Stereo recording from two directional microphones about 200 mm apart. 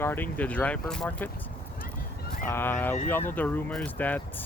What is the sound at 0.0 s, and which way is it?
Speech, 10° left (ahead or behind).